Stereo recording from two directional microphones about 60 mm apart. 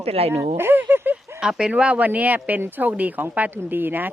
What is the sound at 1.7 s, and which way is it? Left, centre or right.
A woman's voice, right.